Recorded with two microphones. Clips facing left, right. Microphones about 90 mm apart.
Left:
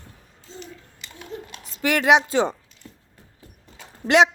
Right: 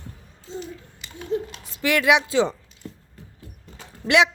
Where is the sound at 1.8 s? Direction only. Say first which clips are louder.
Left 1 dB; 45° left (ahead or behind).